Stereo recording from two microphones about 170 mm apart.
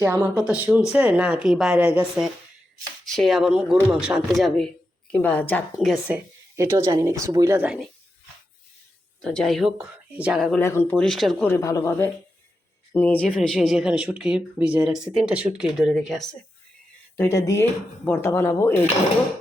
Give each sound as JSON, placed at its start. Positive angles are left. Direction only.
{"t": 0.0, "sound": "speech", "side_deg": -10}
{"t": 5.7, "sound": "speech", "side_deg": -5}
{"t": 6.6, "sound": "speech", "side_deg": -15}
{"t": 9.2, "sound": "speech", "side_deg": 5}
{"t": 10.6, "sound": "speech", "side_deg": 15}
{"t": 11.5, "sound": "speech", "side_deg": 15}
{"t": 17.2, "sound": "speech", "side_deg": 15}